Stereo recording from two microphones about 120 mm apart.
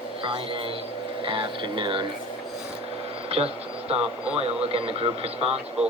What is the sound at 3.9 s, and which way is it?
Speech, 55° right (ahead or behind).